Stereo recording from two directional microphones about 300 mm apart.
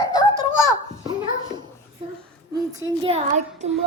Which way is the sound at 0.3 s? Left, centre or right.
Centre.